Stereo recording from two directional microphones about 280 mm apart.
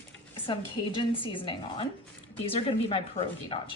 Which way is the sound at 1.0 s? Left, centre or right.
Centre.